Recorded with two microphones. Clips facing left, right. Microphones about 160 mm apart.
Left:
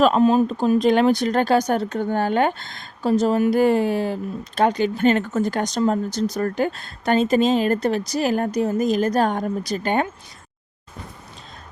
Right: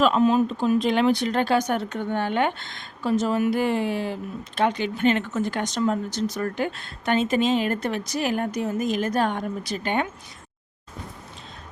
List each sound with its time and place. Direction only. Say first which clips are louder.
0.0 s speech: left 3 dB; 35° left (ahead or behind)